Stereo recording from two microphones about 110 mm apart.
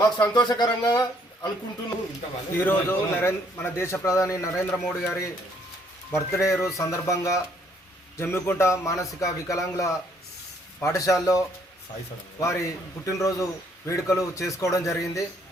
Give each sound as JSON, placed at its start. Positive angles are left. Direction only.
{"t": 0.2, "sound": "speech", "side_deg": 40}
{"t": 2.6, "sound": "a man's voice", "side_deg": 20}